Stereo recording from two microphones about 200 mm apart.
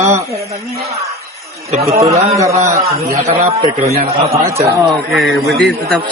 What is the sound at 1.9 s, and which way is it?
Music, 15° right (ahead or behind).